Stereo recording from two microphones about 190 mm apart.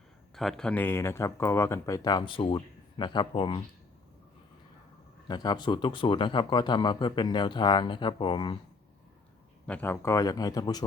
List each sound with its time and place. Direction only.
0.3 s speech: centre (ahead or behind); by 3.6 s 25° left (ahead or behind)
5.3 s speech: 20° left (ahead or behind)
9.6 s speech: 10° left (ahead or behind)